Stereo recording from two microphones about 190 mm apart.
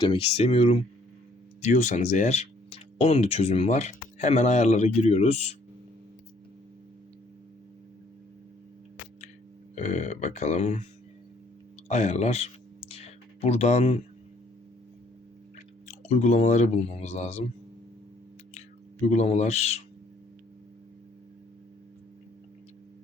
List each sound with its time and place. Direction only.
0.0 s speech: 30° left (ahead or behind)
9.7 s speech: 40° left (ahead or behind)
11.9 s speech: 35° left (ahead or behind)
12.9 s a sound: 35° left (ahead or behind)
15.9 s speech: 40° left (ahead or behind)
19.0 s speech: 35° left (ahead or behind)